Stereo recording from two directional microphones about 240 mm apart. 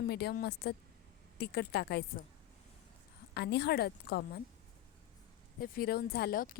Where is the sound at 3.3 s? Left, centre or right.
Left.